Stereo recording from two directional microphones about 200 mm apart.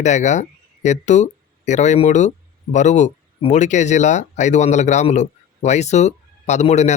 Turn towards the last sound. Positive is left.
turn(degrees=35)  # may be behind; listen again after turning